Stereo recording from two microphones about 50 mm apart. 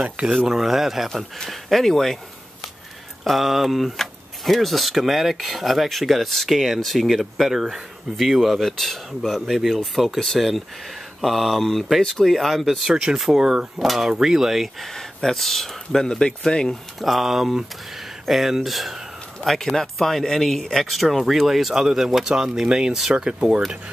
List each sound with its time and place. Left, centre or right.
0.5 s speech: centre
3.3 s speech: centre
12.9 s speech: centre
14.9 s speech: centre
17.0 s speech: centre